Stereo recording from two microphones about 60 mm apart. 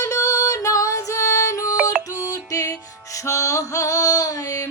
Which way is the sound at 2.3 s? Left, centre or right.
Left.